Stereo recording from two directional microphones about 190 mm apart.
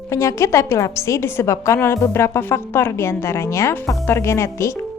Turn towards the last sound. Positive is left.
turn(degrees=15)  # may be behind; listen again after turning